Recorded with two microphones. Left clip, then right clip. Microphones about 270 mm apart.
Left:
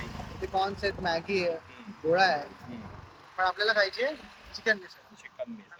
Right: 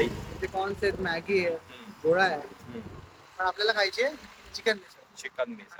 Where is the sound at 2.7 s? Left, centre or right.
Centre.